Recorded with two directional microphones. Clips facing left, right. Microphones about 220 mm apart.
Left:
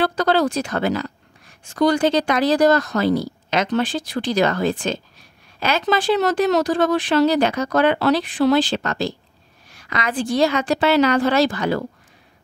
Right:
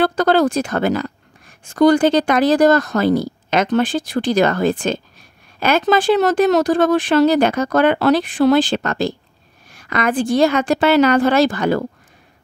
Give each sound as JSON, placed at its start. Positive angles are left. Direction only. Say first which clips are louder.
{"t": 0.0, "sound": "speech", "louder": "right 4 dB", "side_deg": -50}